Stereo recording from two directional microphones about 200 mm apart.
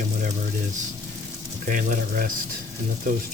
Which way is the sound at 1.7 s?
40° right (ahead or behind).